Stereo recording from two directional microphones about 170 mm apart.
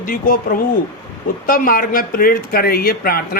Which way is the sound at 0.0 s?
55° left (ahead or behind).